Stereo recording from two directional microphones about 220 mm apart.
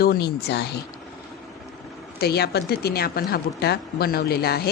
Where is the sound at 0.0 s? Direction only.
45° left (ahead or behind).